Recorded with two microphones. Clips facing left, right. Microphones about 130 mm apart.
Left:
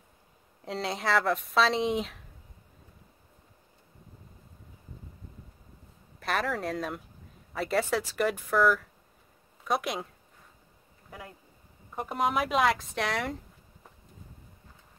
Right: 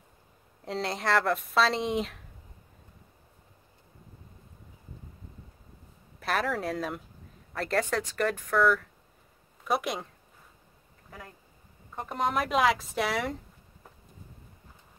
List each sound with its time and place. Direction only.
0.7 s speech: centre (ahead or behind)
6.1 s speech: centre (ahead or behind)
11.9 s speech: 5° left (ahead or behind)